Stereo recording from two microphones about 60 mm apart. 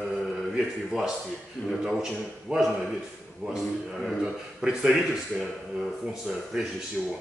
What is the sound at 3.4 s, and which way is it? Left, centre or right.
A man's voice, centre.